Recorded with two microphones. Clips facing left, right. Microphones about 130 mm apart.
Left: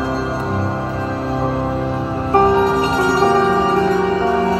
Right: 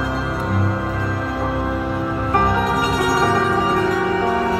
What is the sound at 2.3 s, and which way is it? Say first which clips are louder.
Music: left 7 dB; 30° left (ahead or behind).